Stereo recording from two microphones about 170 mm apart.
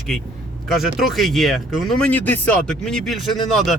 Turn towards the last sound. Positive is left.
turn(degrees=0)  # may be behind; listen again after turning